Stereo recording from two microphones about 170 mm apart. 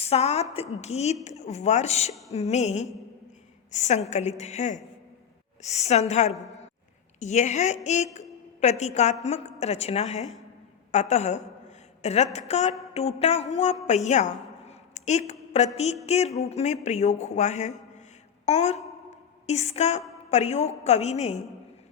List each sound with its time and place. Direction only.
0.0 s a woman's voice: 35° left (ahead or behind)
13.8 s a sound: 45° left (ahead or behind)
15.3 s a woman's voice: 40° left (ahead or behind)